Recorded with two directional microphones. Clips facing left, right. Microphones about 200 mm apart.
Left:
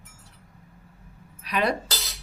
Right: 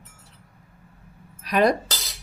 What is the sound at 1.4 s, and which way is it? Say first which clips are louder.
Speech: right 6 dB; 45° right (ahead or behind).